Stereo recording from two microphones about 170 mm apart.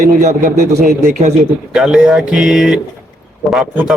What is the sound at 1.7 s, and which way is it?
Speech, 5° right (ahead or behind).